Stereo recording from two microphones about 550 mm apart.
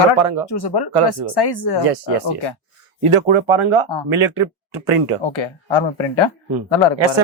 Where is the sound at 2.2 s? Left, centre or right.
Left.